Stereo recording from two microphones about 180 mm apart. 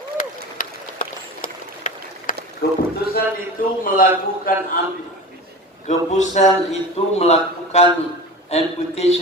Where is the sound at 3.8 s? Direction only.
50° left (ahead or behind).